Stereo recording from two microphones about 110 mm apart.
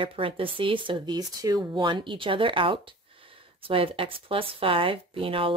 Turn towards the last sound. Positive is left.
turn(degrees=-55)  # may be behind; listen again after turning